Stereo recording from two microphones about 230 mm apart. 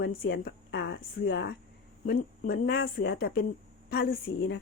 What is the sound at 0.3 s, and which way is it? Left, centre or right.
Speech, left.